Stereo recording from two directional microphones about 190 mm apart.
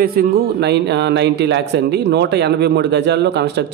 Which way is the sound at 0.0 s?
50° right (ahead or behind).